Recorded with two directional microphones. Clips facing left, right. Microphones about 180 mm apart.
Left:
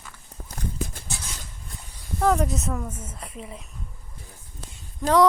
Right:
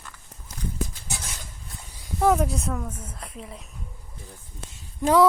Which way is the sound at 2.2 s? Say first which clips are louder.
Right 1 dB; 10° right (ahead or behind).